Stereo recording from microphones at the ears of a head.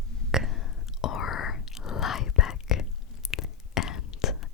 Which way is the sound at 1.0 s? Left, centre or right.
Left.